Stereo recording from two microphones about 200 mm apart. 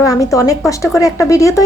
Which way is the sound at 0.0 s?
15° left (ahead or behind).